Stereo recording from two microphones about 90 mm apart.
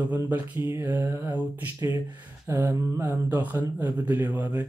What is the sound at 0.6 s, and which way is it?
Mantra, 35° right (ahead or behind).